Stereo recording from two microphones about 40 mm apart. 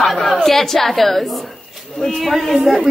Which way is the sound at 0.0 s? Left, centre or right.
Centre.